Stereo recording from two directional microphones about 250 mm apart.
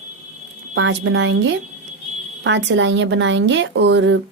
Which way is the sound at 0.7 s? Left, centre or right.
Right.